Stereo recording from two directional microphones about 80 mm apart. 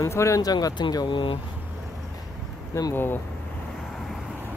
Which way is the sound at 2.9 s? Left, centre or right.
Left.